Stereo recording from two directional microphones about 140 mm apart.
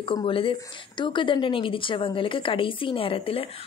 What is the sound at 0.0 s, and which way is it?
A woman's voice, 40° left (ahead or behind).